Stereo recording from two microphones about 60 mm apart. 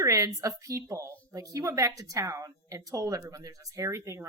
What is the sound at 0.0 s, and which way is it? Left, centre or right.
Speech, right.